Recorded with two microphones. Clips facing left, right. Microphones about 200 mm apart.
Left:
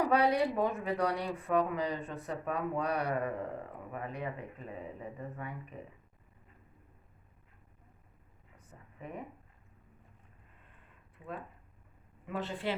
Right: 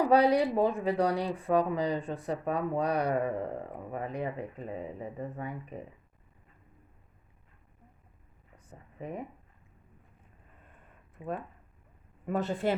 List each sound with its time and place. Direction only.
0.1 s speech: 35° right (ahead or behind)
9.0 s speech: 35° right (ahead or behind)
11.2 s speech: 25° right (ahead or behind)
12.2 s speech: 45° right (ahead or behind)